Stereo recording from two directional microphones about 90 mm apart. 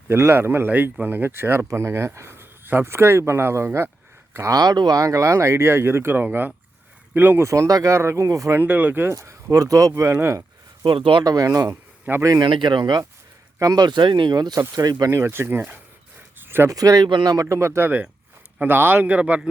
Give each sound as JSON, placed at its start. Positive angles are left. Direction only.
{"t": 0.1, "sound": "speech", "side_deg": -25}
{"t": 8.6, "sound": "speech", "side_deg": -20}
{"t": 9.1, "sound": "speech", "side_deg": -35}
{"t": 10.8, "sound": "speech", "side_deg": -65}
{"t": 11.2, "sound": "speech", "side_deg": -45}
{"t": 12.4, "sound": "speech", "side_deg": -60}
{"t": 15.1, "sound": "speech", "side_deg": -30}
{"t": 16.7, "sound": "speech", "side_deg": -45}
{"t": 17.1, "sound": "speech", "side_deg": -60}
{"t": 17.3, "sound": "a man's voice", "side_deg": -35}